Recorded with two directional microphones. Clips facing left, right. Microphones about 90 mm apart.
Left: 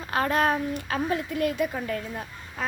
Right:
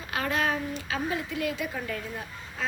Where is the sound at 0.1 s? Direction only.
40° left (ahead or behind).